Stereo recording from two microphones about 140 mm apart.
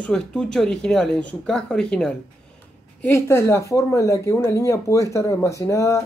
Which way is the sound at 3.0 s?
15° left (ahead or behind).